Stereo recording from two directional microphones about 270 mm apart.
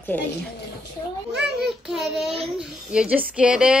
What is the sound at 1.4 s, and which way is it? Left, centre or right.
Speech, centre.